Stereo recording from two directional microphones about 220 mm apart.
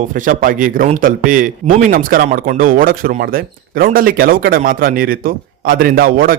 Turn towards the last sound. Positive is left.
turn(degrees=-40)  # may be behind; listen again after turning